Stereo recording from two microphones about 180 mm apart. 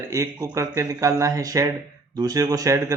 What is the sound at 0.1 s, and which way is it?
Speech, 15° right (ahead or behind).